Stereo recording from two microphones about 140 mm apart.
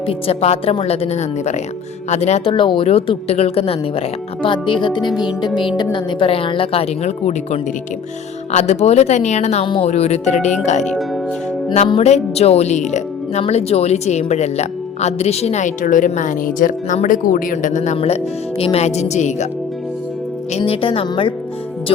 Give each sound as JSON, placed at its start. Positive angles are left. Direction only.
{"t": 0.1, "sound": "speech", "side_deg": 45}
{"t": 9.6, "sound": "speech", "side_deg": 35}
{"t": 9.9, "sound": "speech", "side_deg": 50}
{"t": 10.8, "sound": "speech", "side_deg": 0}
{"t": 11.9, "sound": "speech", "side_deg": 50}
{"t": 13.4, "sound": "a woman's voice", "side_deg": 45}
{"t": 17.9, "sound": "speech", "side_deg": 45}
{"t": 20.5, "sound": "speech", "side_deg": 45}